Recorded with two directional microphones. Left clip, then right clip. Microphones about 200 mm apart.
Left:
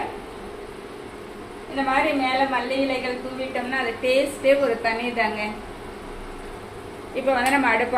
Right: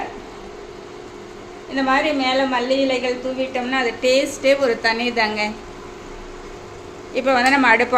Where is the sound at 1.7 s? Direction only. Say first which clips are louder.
Right 3 dB; 60° right (ahead or behind).